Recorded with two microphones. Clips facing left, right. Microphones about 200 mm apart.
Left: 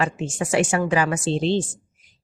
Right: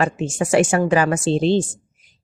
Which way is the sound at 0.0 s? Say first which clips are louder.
Right 4 dB; 45° right (ahead or behind).